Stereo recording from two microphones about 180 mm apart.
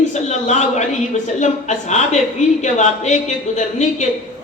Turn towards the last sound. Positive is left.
turn(degrees=40)  # may be behind; listen again after turning